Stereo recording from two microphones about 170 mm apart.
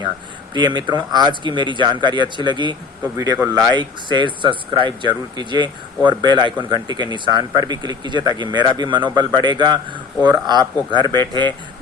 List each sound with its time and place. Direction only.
0.5 s speech: 25° right (ahead or behind)